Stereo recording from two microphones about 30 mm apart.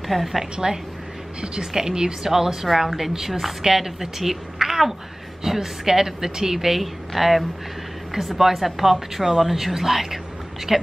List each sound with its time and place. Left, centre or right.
0.1 s a woman's voice: centre
1.4 s a woman's voice: right
1.7 s a woman's voice: centre